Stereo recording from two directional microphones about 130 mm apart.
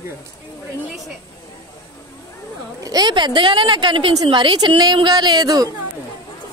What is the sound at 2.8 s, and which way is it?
A woman's voice, 30° right (ahead or behind).